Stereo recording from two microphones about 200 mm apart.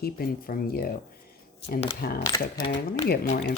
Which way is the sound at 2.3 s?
25° left (ahead or behind).